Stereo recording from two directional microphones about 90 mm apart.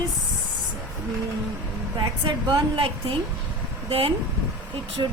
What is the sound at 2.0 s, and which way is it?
A woman's voice, 60° right (ahead or behind).